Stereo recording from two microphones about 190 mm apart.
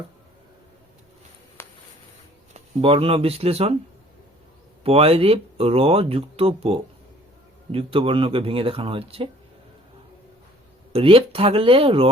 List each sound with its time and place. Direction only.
1.6 s a sound: 10° left (ahead or behind)
2.5 s speech: 30° right (ahead or behind)
4.8 s speech: 30° right (ahead or behind)
10.9 s speech: 30° right (ahead or behind)